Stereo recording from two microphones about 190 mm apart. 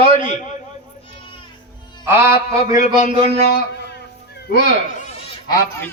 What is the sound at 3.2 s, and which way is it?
Speech, 35° right (ahead or behind).